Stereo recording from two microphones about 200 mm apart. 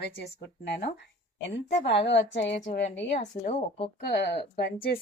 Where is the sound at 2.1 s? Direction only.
65° left (ahead or behind).